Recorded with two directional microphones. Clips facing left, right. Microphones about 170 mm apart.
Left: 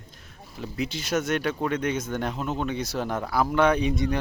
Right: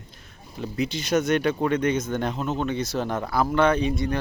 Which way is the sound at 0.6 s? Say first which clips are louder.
Right 3 dB; 5° left (ahead or behind).